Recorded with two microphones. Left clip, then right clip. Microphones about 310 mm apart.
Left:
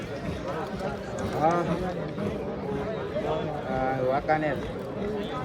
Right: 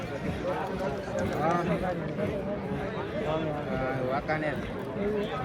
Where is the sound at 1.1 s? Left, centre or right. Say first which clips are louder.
Left 4 dB; left.